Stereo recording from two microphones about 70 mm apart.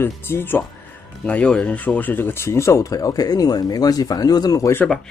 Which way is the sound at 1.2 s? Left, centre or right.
Centre.